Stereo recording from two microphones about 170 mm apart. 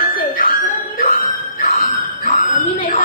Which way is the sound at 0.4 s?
55° left (ahead or behind).